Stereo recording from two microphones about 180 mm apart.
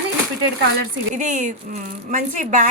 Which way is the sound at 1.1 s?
45° right (ahead or behind).